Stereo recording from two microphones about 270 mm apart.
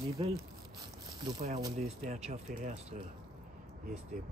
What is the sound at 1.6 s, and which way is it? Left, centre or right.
Speech, centre.